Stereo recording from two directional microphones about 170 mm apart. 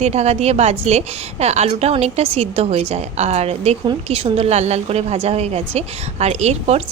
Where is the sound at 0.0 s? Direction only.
40° right (ahead or behind).